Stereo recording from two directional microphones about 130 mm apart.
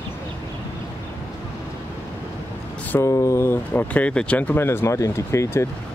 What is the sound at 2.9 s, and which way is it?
Speech, 20° left (ahead or behind).